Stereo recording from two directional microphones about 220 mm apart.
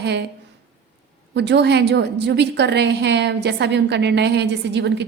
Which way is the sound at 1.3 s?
50° right (ahead or behind).